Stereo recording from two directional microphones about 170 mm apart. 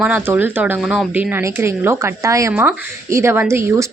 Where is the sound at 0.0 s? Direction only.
10° right (ahead or behind).